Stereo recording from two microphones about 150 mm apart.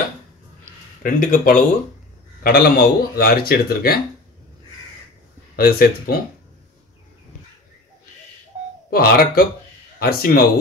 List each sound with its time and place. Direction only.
1.0 s speech: 65° left (ahead or behind)
2.4 s speech: 90° left
5.6 s speech: 90° left
8.9 s speech: 80° left